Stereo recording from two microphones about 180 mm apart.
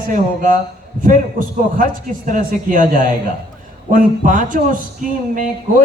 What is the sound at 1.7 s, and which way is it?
A man's voice, 45° right (ahead or behind).